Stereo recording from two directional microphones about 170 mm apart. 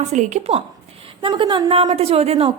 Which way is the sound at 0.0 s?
45° right (ahead or behind).